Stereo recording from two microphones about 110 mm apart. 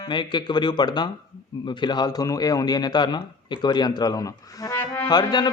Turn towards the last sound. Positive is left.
turn(degrees=40)  # may be behind; listen again after turning